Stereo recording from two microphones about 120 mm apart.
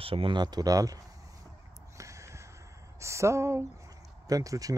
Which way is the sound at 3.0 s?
25° right (ahead or behind).